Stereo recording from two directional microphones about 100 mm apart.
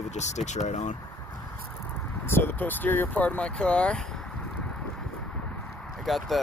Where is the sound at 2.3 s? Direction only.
20° left (ahead or behind).